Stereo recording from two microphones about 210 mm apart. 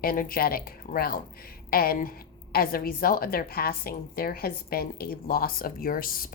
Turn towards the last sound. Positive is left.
turn(degrees=45)  # may be behind; listen again after turning